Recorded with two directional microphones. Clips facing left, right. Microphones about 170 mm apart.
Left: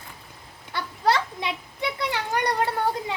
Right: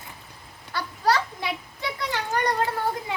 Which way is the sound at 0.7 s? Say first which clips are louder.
Even; 20° left (ahead or behind).